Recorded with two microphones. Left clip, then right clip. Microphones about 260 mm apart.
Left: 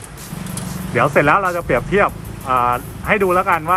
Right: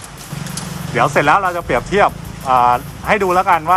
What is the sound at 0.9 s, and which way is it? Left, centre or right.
Speech, centre.